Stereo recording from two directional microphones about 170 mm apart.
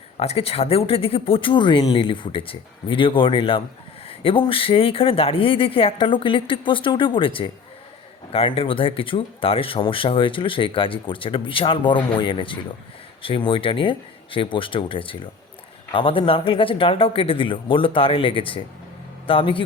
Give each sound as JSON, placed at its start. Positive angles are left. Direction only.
{"t": 0.2, "sound": "speech", "side_deg": 35}